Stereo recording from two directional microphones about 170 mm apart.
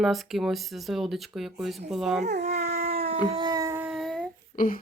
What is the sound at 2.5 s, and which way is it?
Dog, 65° right (ahead or behind).